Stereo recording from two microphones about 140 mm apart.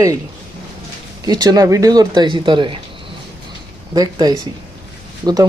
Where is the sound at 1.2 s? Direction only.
30° right (ahead or behind).